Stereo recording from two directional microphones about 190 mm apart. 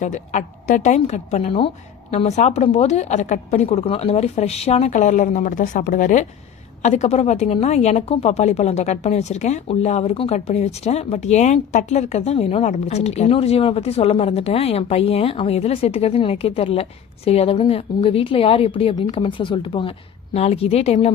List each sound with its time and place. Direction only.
0.0 s a woman's voice: 40° left (ahead or behind)